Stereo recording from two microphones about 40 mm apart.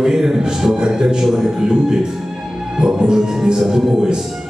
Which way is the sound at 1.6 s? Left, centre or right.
Centre.